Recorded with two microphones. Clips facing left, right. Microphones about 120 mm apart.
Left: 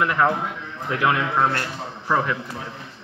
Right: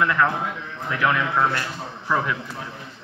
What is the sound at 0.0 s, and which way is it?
Speech, 25° left (ahead or behind).